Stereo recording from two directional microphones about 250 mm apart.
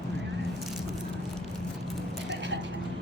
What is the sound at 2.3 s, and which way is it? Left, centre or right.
Vehicle, right.